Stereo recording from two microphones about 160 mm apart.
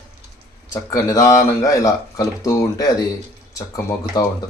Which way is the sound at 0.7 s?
20° left (ahead or behind).